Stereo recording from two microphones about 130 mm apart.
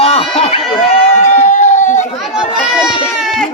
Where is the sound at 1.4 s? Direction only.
65° left (ahead or behind).